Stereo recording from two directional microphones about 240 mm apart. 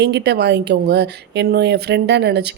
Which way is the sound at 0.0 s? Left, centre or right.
Right.